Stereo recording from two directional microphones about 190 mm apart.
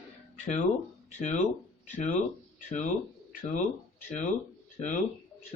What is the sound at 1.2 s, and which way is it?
Speech, 40° left (ahead or behind).